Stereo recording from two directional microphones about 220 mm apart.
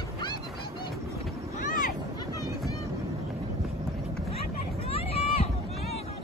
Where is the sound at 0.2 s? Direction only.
20° left (ahead or behind).